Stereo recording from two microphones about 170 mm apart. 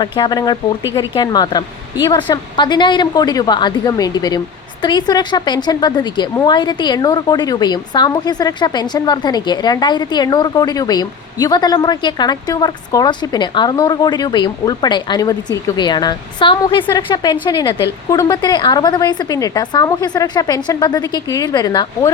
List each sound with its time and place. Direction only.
0.0 s a woman's voice: 25° left (ahead or behind)